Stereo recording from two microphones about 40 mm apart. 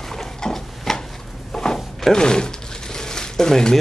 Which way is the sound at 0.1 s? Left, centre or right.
Centre.